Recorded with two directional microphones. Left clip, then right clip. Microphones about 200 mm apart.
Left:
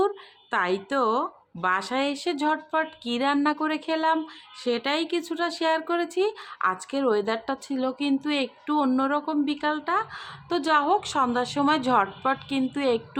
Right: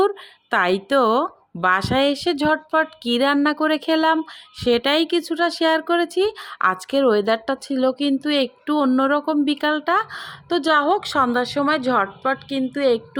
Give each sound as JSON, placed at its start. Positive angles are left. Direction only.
{"t": 0.5, "sound": "speech", "side_deg": -30}